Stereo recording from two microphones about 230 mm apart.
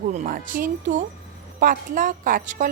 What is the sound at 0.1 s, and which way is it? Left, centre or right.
A woman's voice, right.